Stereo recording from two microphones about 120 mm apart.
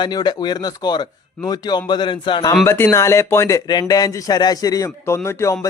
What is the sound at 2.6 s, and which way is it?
A man's voice, 20° left (ahead or behind).